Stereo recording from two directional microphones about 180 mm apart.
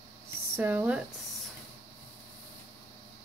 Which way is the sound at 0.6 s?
10° right (ahead or behind).